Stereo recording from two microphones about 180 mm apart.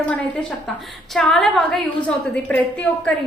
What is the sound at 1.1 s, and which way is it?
A woman's voice, centre (ahead or behind).